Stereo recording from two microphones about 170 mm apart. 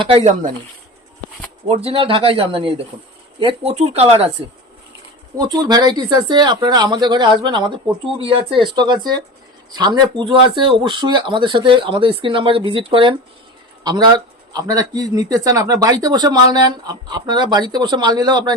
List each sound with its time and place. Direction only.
0.2 s speech: 45° right (ahead or behind)
1.6 s speech: 35° right (ahead or behind)
5.4 s speech: 25° right (ahead or behind)